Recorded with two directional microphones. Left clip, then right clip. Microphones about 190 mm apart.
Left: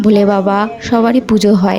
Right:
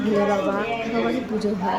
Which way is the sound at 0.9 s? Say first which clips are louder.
Left 14 dB; 50° left (ahead or behind).